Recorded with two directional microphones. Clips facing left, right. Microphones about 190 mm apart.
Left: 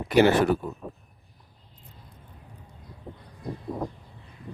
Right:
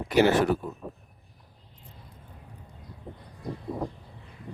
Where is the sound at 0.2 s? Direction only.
60° left (ahead or behind).